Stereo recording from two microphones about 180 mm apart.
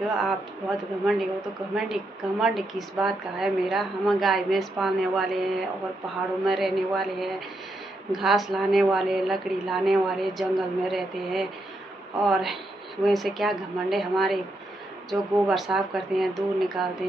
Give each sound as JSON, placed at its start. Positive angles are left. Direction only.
{"t": 0.0, "sound": "a woman's voice", "side_deg": 0}
{"t": 2.4, "sound": "a woman's voice", "side_deg": 0}